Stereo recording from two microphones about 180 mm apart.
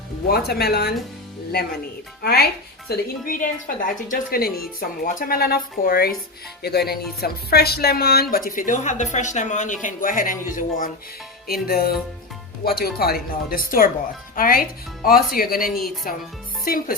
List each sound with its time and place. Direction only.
0.3 s speech: 60° left (ahead or behind)
2.2 s speech: 60° left (ahead or behind)
2.9 s speech: 50° left (ahead or behind)